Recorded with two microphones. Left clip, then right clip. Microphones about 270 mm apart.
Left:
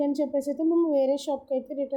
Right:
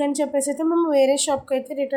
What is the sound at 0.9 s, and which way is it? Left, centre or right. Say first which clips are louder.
Speech: right 6 dB; centre.